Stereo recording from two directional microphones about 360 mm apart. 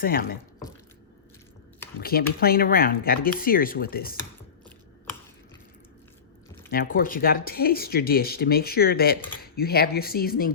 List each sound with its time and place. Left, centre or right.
0.0 s speech: left
2.0 s speech: left
6.7 s speech: left